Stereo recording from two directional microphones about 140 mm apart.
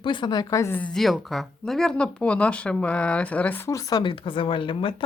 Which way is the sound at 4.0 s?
40° left (ahead or behind).